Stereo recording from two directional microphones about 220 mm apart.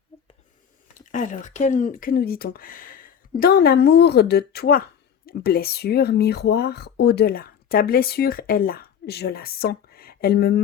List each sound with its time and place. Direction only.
1.1 s speech: 35° left (ahead or behind)